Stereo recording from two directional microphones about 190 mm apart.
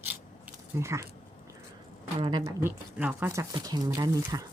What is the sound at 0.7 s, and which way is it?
Speech, 15° right (ahead or behind).